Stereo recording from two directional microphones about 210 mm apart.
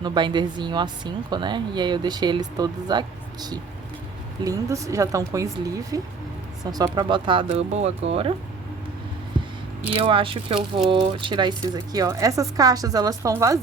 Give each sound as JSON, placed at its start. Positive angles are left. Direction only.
{"t": 0.0, "sound": "a woman's voice", "side_deg": -20}
{"t": 9.9, "sound": "a woman's voice", "side_deg": -25}